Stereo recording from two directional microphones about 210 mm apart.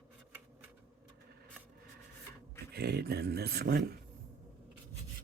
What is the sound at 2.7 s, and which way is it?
Speech, 50° right (ahead or behind).